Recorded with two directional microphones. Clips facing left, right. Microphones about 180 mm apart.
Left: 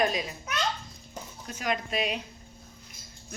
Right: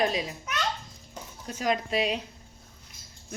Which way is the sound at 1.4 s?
35° right (ahead or behind).